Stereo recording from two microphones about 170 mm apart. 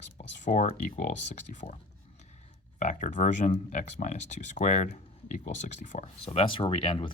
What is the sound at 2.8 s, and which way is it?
Speech, 45° left (ahead or behind).